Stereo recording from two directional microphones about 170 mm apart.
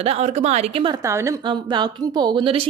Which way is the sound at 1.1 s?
20° right (ahead or behind).